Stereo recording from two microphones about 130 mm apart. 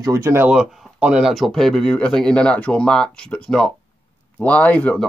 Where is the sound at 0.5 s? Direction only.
10° right (ahead or behind).